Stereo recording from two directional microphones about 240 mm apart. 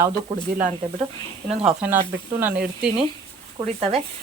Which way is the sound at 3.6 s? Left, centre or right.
Right.